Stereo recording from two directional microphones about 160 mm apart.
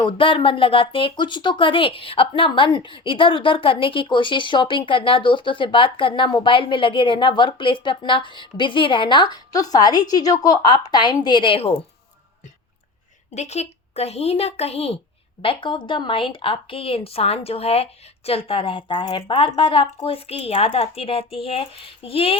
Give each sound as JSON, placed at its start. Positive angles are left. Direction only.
{"t": 0.0, "sound": "speech", "side_deg": 30}
{"t": 13.3, "sound": "speech", "side_deg": 45}